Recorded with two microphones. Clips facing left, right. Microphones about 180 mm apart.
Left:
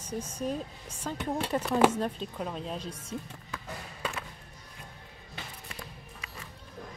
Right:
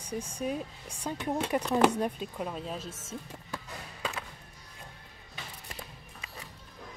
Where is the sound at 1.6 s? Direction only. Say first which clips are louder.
Left 1 dB; 5° left (ahead or behind).